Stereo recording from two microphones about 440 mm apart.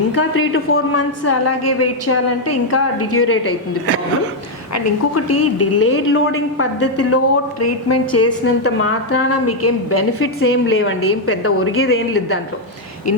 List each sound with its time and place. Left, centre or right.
0.1 s a woman's voice: left
4.7 s a woman's voice: left